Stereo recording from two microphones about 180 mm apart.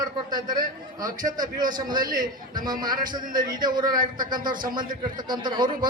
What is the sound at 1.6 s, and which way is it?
A man's voice, 25° right (ahead or behind).